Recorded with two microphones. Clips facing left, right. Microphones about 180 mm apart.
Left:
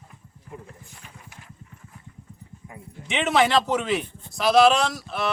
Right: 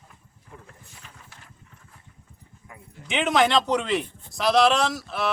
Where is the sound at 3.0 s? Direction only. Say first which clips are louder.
Even; centre (ahead or behind).